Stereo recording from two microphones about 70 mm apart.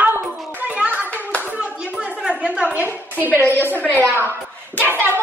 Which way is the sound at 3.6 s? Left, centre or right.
Right.